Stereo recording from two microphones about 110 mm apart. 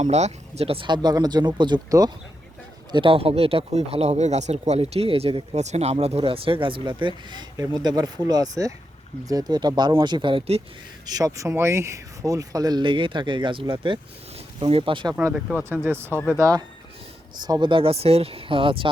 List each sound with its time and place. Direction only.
0.0 s speech: 85° right; by 0.9 s 65° right (ahead or behind)
0.9 s speech: 40° right (ahead or behind)
2.9 s speech: 50° right (ahead or behind)
5.5 s speech: 85° right; by 10.4 s 45° right (ahead or behind)
11.0 s speech: 35° right (ahead or behind); by 15.1 s 50° right (ahead or behind)
15.7 s speech: 20° right (ahead or behind)
16.4 s speech: 30° right (ahead or behind)
17.4 s speech: 40° right (ahead or behind)